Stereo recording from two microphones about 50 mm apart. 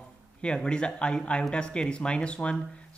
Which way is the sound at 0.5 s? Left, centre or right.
Centre.